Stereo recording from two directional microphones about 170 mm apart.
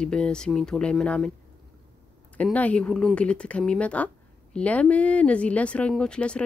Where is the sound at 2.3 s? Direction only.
10° left (ahead or behind).